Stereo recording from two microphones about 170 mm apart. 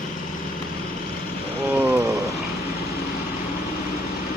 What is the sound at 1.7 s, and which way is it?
Rain on surface, 10° right (ahead or behind).